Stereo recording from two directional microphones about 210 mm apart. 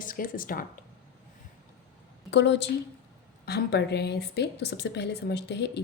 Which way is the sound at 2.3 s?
55° left (ahead or behind).